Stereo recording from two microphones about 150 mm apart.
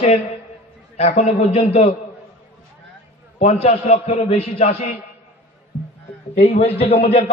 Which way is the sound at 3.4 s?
45° left (ahead or behind).